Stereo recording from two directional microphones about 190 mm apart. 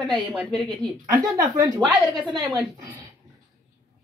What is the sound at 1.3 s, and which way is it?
Speech, 15° right (ahead or behind).